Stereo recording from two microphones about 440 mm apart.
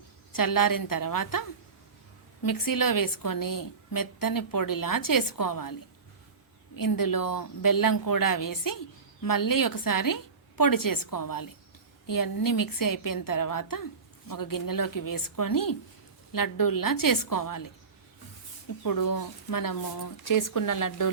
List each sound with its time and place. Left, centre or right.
0.3 s a woman's voice: left
6.7 s a woman's voice: left
18.8 s a woman's voice: left